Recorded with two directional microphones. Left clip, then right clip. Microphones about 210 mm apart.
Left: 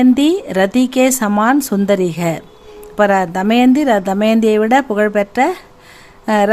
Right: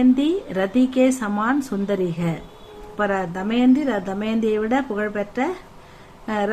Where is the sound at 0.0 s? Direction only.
55° left (ahead or behind).